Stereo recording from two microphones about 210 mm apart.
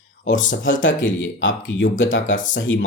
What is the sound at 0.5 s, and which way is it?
Speech, 65° left (ahead or behind).